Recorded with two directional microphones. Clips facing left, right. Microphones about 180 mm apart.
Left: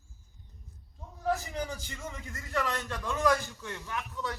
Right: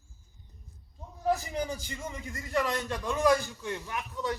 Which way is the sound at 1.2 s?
15° right (ahead or behind).